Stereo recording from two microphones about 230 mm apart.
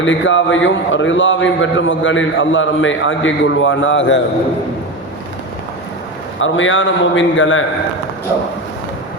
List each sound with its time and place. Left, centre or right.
0.0 s a man's voice: left
6.4 s a man's voice: left